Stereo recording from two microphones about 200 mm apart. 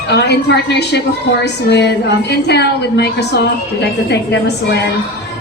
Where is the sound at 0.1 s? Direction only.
55° left (ahead or behind).